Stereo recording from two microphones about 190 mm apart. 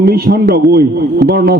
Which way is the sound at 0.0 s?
60° right (ahead or behind).